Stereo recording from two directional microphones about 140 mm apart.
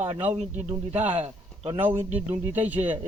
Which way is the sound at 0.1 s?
10° right (ahead or behind).